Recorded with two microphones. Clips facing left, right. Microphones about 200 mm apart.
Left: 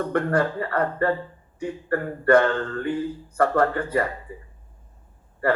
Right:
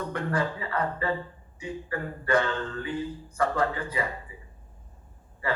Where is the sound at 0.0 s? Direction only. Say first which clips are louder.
Left 7 dB; 55° left (ahead or behind).